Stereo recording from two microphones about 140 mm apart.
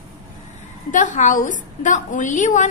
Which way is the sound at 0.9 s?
65° left (ahead or behind).